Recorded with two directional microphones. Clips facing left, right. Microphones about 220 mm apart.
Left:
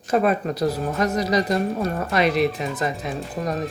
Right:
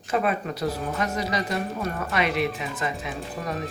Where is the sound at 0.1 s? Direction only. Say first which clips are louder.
Left 5 dB; 40° left (ahead or behind).